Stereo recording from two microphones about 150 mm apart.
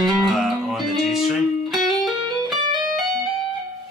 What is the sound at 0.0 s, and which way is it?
Music, centre (ahead or behind).